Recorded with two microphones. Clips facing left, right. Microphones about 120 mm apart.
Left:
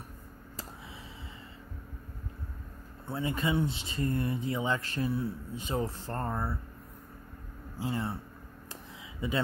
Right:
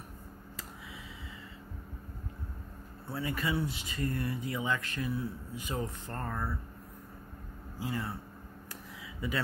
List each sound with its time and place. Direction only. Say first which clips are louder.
3.1 s speech: left 3 dB; 25° left (ahead or behind)
7.8 s speech: left 3 dB; 25° left (ahead or behind)
9.2 s speech: left 3 dB; 25° left (ahead or behind)